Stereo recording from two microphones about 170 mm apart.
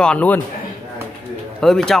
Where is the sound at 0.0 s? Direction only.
10° left (ahead or behind).